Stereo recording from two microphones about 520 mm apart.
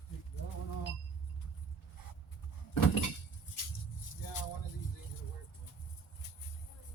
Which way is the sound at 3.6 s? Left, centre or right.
Left.